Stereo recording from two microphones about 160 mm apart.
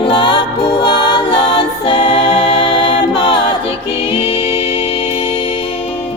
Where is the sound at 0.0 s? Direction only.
30° left (ahead or behind).